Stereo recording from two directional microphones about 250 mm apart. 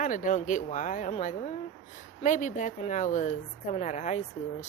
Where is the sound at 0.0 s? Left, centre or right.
Left.